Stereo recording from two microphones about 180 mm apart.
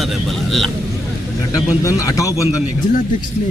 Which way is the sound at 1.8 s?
20° left (ahead or behind).